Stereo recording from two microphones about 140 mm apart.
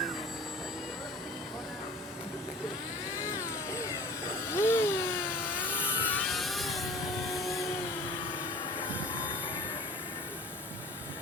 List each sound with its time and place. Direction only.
3.2 s vehicle: 20° left (ahead or behind)
4.5 s a sound: 15° left (ahead or behind)
6.2 s music: centre (ahead or behind)